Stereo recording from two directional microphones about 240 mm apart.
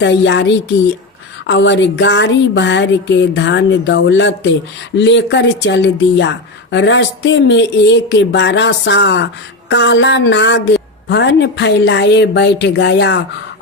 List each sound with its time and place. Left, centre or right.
0.0 s a woman's voice: left